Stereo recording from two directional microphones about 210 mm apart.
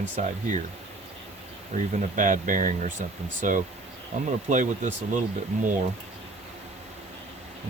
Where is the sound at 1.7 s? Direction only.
35° right (ahead or behind).